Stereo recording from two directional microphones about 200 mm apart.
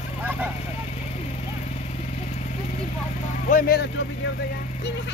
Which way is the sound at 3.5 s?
45° left (ahead or behind).